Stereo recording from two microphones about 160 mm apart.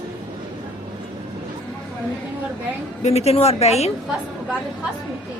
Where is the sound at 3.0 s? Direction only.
40° left (ahead or behind).